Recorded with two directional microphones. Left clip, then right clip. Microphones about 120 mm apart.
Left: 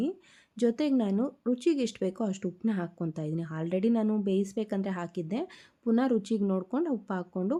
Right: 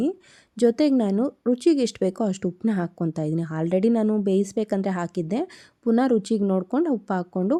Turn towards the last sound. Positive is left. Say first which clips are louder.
# right 8 dB
turn(degrees=-45)  # may be behind; listen again after turning